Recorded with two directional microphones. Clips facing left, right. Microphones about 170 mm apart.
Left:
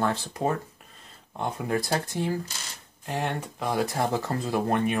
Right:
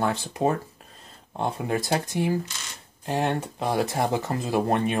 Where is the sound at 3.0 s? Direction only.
30° right (ahead or behind).